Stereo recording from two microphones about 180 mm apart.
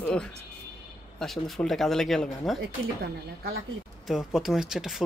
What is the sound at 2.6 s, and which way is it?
Speech, 60° right (ahead or behind).